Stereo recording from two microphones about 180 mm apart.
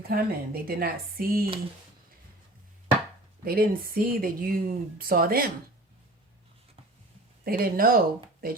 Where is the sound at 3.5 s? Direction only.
55° right (ahead or behind).